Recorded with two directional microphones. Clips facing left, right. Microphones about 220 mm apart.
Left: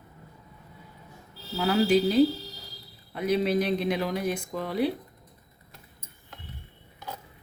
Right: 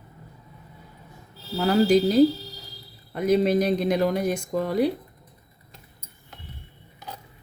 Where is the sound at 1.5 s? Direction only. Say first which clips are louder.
Right 4 dB; 40° right (ahead or behind).